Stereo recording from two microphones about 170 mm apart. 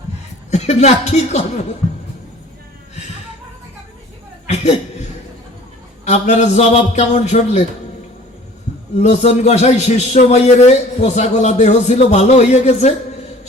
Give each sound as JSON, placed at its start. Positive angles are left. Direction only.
{"t": 0.5, "sound": "a man's voice", "side_deg": 40}
{"t": 4.4, "sound": "chuckle", "side_deg": 40}
{"t": 6.1, "sound": "a man's voice", "side_deg": 40}
{"t": 9.0, "sound": "a man's voice", "side_deg": 40}